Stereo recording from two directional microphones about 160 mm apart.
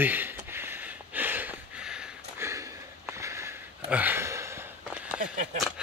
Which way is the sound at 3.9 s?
10° right (ahead or behind).